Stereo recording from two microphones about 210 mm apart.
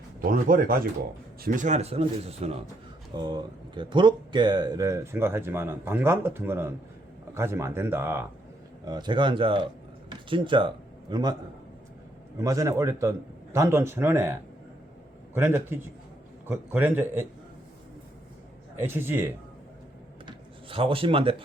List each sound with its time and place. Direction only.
0.2 s speech: 40° right (ahead or behind); by 11.3 s 20° right (ahead or behind)
12.4 s speech: 15° right (ahead or behind)
15.4 s speech: 10° right (ahead or behind)
18.8 s speech: 10° right (ahead or behind)
20.2 s rub: 25° right (ahead or behind)